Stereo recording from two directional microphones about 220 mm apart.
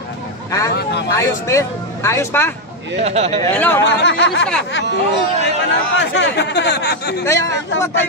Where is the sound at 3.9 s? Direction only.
55° left (ahead or behind).